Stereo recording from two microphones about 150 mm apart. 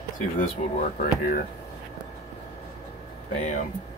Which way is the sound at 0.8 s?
65° left (ahead or behind).